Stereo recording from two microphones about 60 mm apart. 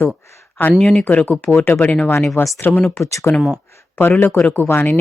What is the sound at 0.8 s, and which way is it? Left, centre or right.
Speech, centre.